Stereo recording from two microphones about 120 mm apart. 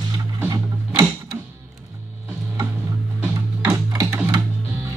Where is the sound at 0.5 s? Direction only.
30° right (ahead or behind).